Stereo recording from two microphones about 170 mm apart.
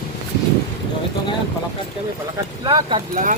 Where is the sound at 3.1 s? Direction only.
50° right (ahead or behind).